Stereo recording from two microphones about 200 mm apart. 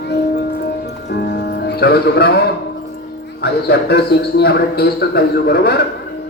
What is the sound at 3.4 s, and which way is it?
A man's voice, 55° left (ahead or behind).